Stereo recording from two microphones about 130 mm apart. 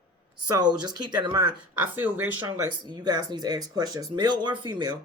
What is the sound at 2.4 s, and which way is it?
Speech, 35° right (ahead or behind).